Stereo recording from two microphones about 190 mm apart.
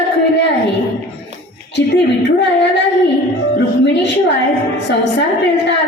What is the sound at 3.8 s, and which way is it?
A woman's voice, 65° left (ahead or behind).